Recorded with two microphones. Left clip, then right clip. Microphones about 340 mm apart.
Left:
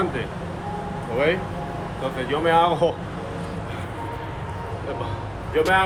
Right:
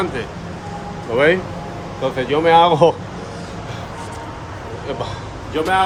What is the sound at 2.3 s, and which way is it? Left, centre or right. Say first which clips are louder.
Speech: right 7 dB; right.